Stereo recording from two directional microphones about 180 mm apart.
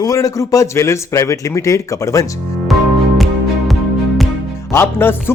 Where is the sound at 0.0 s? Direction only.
20° left (ahead or behind).